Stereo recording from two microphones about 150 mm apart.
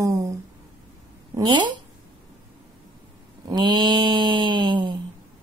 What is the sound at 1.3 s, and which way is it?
Speech, 30° right (ahead or behind).